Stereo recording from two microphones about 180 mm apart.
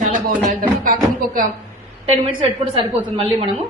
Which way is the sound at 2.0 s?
30° right (ahead or behind).